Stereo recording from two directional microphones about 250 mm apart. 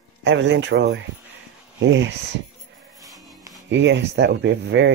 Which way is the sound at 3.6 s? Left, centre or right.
Right.